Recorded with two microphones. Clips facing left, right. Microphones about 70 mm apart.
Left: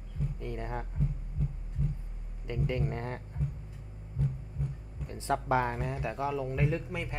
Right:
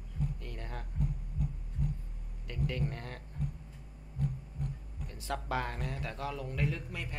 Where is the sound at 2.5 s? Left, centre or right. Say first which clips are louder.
Left 4 dB; left.